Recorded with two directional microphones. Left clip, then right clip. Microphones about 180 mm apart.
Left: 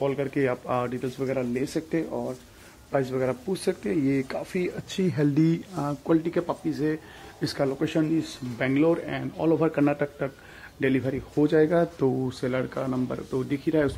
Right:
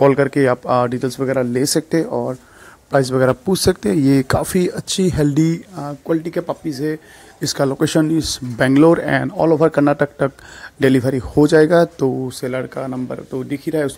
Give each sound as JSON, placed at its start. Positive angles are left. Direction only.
{"t": 0.0, "sound": "speech", "side_deg": -40}
{"t": 5.8, "sound": "speech", "side_deg": -15}
{"t": 7.8, "sound": "speech", "side_deg": -45}
{"t": 12.1, "sound": "speech", "side_deg": -20}